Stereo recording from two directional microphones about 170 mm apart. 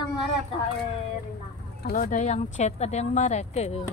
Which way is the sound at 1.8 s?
55° left (ahead or behind).